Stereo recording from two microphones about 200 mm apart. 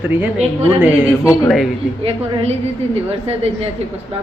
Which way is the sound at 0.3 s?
30° right (ahead or behind).